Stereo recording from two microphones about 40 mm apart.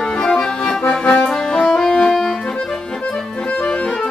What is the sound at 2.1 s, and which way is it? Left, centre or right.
Accordion, centre.